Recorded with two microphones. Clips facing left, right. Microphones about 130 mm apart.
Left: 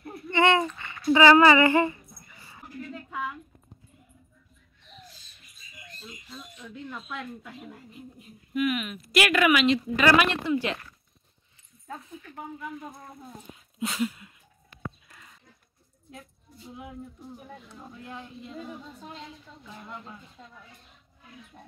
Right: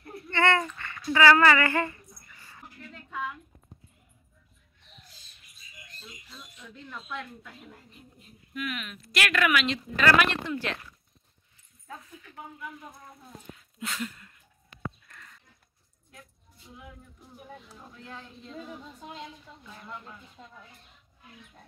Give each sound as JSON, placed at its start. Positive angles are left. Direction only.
{"t": 0.0, "sound": "a sound", "side_deg": 15}
{"t": 6.6, "sound": "speech", "side_deg": 10}
{"t": 13.7, "sound": "speech", "side_deg": 15}
{"t": 15.0, "sound": "a sound", "side_deg": 15}
{"t": 16.1, "sound": "keys jangling", "side_deg": 25}
{"t": 17.7, "sound": "speech", "side_deg": 15}
{"t": 19.6, "sound": "speech", "side_deg": 15}